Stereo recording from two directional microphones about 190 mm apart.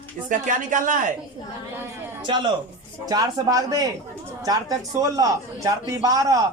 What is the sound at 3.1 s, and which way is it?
A man's voice, 20° right (ahead or behind).